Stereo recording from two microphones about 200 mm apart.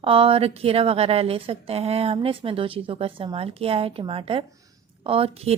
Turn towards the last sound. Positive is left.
turn(degrees=-30)  # may be behind; listen again after turning